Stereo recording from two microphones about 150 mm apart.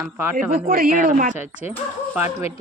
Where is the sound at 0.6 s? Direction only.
70° right (ahead or behind).